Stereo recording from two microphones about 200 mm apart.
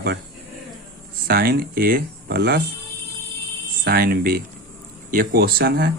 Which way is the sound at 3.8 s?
50° right (ahead or behind).